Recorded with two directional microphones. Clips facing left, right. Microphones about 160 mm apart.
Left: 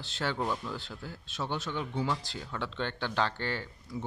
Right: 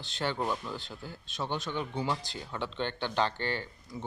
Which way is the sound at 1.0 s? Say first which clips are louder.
Even; 5° left (ahead or behind).